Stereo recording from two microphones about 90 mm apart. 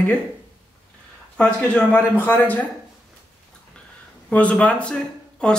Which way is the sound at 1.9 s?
20° left (ahead or behind).